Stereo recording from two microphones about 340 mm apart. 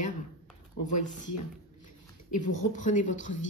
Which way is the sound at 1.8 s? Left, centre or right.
Left.